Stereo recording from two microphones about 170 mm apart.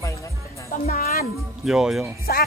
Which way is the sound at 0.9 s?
60° left (ahead or behind).